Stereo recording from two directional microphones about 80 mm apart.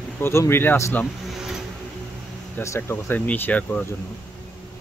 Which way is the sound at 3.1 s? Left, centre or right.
Left.